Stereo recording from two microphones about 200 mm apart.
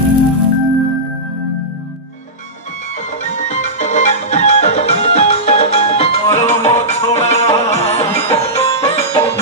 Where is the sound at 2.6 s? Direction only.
35° left (ahead or behind).